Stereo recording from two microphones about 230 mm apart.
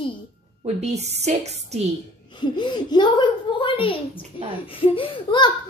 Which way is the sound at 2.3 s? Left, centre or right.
Centre.